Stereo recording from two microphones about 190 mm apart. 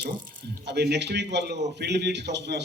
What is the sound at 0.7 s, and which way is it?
A man's voice, 60° right (ahead or behind).